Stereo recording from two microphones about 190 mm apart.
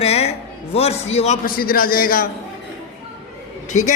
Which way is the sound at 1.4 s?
50° left (ahead or behind).